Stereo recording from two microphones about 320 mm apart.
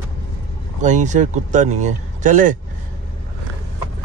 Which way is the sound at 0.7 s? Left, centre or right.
Right.